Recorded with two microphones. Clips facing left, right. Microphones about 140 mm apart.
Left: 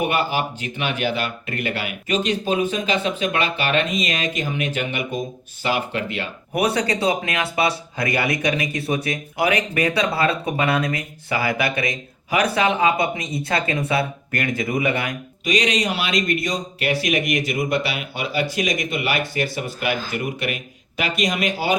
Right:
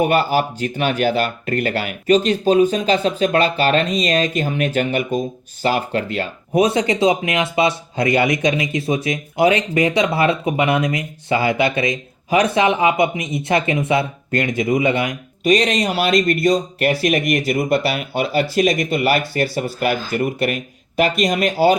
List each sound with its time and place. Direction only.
0.0 s speech: 40° right (ahead or behind)
6.6 s speech: 20° right (ahead or behind)
15.4 s speech: 45° right (ahead or behind)